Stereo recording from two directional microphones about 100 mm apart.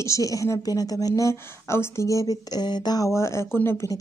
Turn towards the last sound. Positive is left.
turn(degrees=25)  # may be behind; listen again after turning